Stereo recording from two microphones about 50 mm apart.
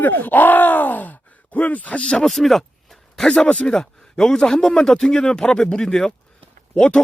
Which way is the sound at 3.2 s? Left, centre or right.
Centre.